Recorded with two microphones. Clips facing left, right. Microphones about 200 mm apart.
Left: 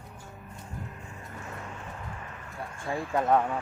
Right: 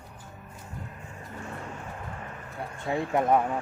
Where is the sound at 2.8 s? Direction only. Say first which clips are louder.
Right 2 dB; 20° right (ahead or behind).